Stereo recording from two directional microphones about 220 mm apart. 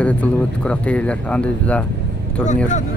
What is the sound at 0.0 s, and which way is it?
Speech, 5° left (ahead or behind).